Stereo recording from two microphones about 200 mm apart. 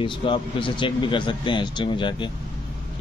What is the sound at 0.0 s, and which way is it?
A man's voice, 25° left (ahead or behind).